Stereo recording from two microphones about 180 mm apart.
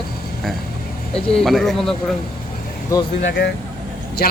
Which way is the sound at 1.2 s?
Centre (ahead or behind).